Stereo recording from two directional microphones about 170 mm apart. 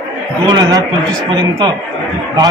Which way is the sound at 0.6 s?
20° right (ahead or behind).